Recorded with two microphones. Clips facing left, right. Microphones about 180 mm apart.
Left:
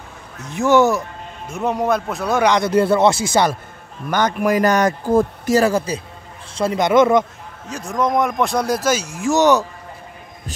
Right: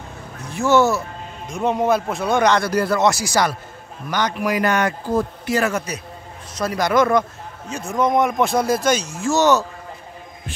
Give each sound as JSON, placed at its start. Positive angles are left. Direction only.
{"t": 0.5, "sound": "speech", "side_deg": 15}
{"t": 1.5, "sound": "speech", "side_deg": 0}
{"t": 2.4, "sound": "speech", "side_deg": 15}
{"t": 2.7, "sound": "speech", "side_deg": 25}
{"t": 4.1, "sound": "a man's voice", "side_deg": 50}
{"t": 5.6, "sound": "a man's voice", "side_deg": 30}
{"t": 7.7, "sound": "speech", "side_deg": 0}